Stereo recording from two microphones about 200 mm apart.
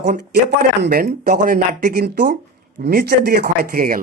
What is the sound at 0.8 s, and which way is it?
Speech, 50° right (ahead or behind).